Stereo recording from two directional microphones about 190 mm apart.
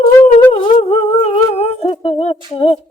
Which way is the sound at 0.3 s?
30° left (ahead or behind).